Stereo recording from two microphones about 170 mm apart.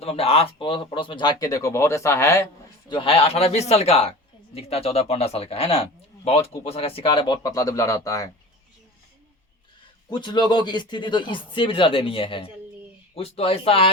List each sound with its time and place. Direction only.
0.0 s speech: 35° left (ahead or behind); by 2.5 s 15° left (ahead or behind)
2.9 s a man's voice: 30° left (ahead or behind)
10.1 s a man's voice: 25° left (ahead or behind)